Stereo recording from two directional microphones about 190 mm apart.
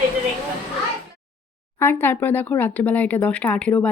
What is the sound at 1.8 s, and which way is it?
Speech, 10° left (ahead or behind).